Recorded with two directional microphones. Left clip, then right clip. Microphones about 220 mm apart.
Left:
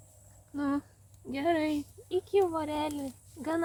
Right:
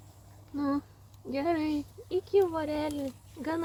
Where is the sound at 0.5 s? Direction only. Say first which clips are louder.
Right 1 dB; 35° left (ahead or behind).